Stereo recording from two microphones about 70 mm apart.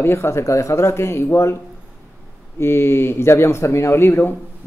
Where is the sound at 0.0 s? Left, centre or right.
Left.